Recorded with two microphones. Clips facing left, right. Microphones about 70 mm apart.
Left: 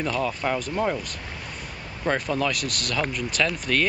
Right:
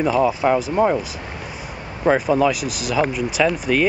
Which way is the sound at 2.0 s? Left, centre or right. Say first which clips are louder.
Right 8 dB; centre.